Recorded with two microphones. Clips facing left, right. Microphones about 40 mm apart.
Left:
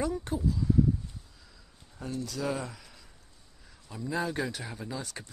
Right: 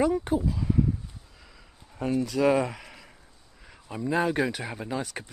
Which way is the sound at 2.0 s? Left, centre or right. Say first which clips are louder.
Right 10 dB; right.